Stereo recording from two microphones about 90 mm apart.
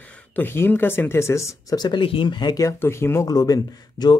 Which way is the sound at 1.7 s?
55° left (ahead or behind).